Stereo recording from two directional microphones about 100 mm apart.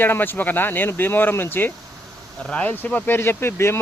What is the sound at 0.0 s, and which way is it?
Speech, 20° left (ahead or behind).